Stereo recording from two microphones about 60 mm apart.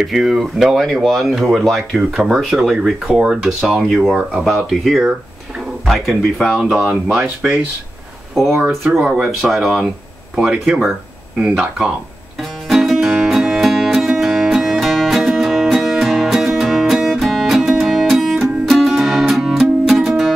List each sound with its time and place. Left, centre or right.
0.0 s speech: centre
2.2 s speech: centre
9.0 s speech: centre
9.5 s speech: centre
10.3 s speech: centre
12.4 s music: centre